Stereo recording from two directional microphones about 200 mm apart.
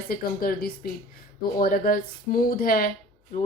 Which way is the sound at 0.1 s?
45° left (ahead or behind).